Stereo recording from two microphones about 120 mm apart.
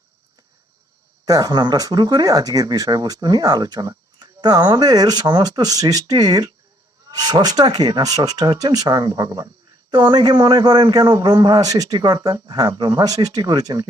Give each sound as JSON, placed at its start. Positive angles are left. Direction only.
{"t": 1.2, "sound": "speech", "side_deg": -30}